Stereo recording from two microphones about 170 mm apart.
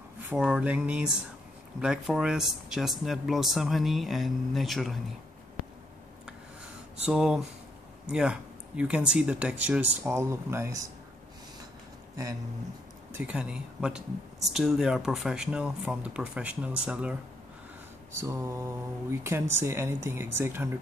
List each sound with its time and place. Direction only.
0.3 s speech: 5° right (ahead or behind)
7.1 s speech: 5° right (ahead or behind)
13.1 s speech: 5° right (ahead or behind)